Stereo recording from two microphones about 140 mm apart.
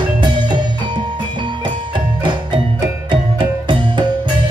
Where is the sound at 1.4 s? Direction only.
35° right (ahead or behind).